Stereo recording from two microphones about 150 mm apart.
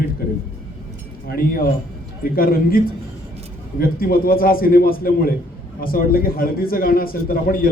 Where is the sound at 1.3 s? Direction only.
75° left (ahead or behind).